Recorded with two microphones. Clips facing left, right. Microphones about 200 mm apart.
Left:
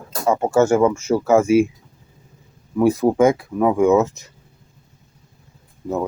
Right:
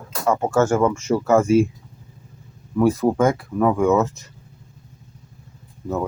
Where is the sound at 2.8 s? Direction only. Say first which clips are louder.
Left 2 dB; 10° left (ahead or behind).